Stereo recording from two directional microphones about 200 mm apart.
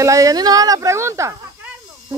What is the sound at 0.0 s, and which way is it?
Speech, 15° right (ahead or behind).